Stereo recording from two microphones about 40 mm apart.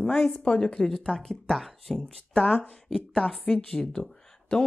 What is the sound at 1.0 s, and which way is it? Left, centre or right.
Speech, left.